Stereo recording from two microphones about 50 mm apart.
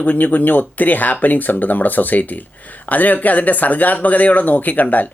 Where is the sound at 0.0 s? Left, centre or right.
Left.